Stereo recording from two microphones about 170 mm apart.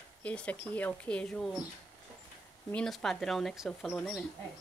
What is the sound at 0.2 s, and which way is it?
Speech, 10° left (ahead or behind).